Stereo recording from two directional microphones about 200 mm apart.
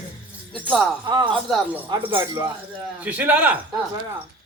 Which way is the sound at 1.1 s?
20° right (ahead or behind).